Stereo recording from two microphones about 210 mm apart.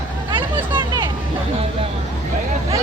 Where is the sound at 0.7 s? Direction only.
20° right (ahead or behind).